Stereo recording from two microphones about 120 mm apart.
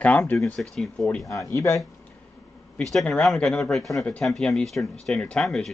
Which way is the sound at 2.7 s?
5° left (ahead or behind).